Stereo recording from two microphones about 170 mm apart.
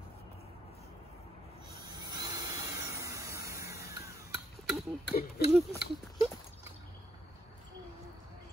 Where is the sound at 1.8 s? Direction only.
25° right (ahead or behind).